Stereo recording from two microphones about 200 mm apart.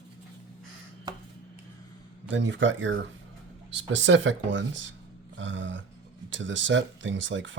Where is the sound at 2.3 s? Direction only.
65° right (ahead or behind).